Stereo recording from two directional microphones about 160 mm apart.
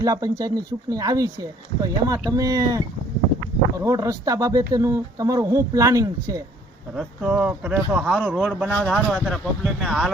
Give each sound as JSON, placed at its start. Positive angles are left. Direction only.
{"t": 0.0, "sound": "speech", "side_deg": -20}
{"t": 3.8, "sound": "speech", "side_deg": -20}
{"t": 6.9, "sound": "speech", "side_deg": -5}